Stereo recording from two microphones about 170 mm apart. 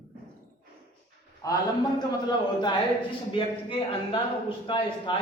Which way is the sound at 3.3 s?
30° left (ahead or behind).